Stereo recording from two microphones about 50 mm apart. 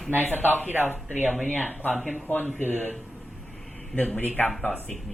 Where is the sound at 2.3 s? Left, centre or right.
Left.